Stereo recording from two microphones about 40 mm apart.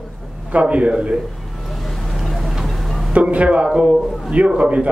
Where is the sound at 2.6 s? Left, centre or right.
Centre.